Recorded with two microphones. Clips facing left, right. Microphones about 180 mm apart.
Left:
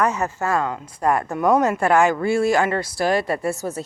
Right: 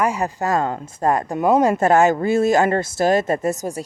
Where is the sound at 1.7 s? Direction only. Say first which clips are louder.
Right 3 dB; 45° right (ahead or behind).